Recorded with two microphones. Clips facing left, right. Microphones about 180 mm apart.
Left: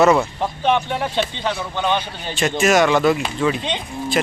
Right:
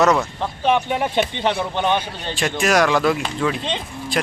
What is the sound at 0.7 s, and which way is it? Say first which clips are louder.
Speech: right 2 dB; 10° right (ahead or behind).